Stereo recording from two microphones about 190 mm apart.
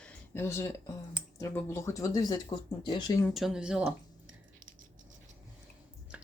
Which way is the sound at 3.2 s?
Centre (ahead or behind).